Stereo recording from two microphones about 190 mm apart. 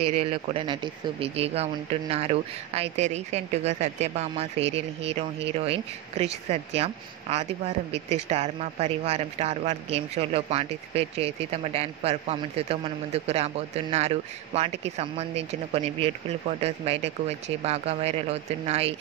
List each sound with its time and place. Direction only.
0.0 s speech: 30° right (ahead or behind)